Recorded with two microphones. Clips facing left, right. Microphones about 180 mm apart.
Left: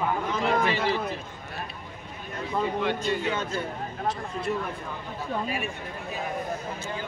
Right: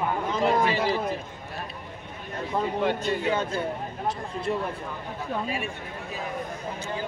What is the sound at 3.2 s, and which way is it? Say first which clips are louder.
Speech: right 3 dB; 30° right (ahead or behind).